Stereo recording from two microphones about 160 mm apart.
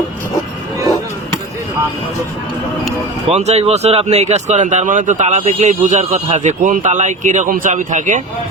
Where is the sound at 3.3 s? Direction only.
40° right (ahead or behind).